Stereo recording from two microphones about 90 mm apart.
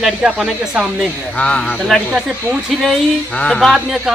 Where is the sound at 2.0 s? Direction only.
10° right (ahead or behind).